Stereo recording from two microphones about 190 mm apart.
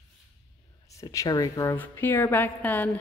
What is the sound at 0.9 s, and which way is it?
A woman's voice, 15° left (ahead or behind).